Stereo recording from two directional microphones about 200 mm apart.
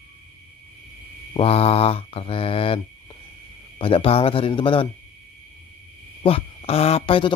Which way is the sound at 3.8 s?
25° left (ahead or behind).